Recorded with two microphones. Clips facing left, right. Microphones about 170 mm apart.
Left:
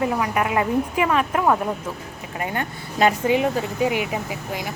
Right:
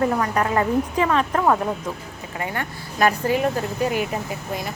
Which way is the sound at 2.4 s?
20° left (ahead or behind).